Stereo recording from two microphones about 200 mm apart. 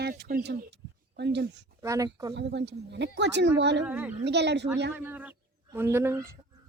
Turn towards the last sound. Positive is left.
turn(degrees=-15)  # may be behind; listen again after turning